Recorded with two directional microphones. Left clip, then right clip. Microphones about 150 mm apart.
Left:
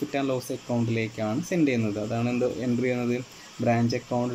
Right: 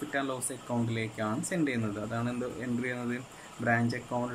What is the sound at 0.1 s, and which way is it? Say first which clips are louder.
A man's voice: left 3 dB; 20° left (ahead or behind).